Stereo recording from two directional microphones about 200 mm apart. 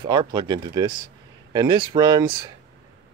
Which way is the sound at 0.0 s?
25° right (ahead or behind).